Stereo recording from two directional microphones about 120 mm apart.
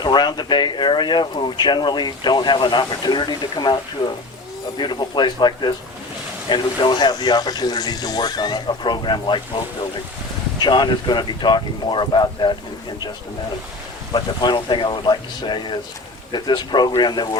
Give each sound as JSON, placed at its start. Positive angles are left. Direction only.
{"t": 0.0, "sound": "speech", "side_deg": 35}
{"t": 4.8, "sound": "speech", "side_deg": 40}
{"t": 10.6, "sound": "speech", "side_deg": 40}
{"t": 14.1, "sound": "speech", "side_deg": 40}